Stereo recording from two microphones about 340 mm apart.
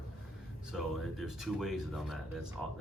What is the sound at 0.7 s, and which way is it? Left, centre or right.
Speech, centre.